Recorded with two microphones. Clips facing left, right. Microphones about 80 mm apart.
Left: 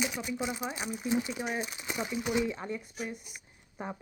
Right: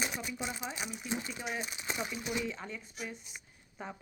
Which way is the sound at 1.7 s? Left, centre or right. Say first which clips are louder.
Even; centre.